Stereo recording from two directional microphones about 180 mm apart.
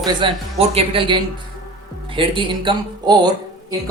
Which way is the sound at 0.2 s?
25° right (ahead or behind).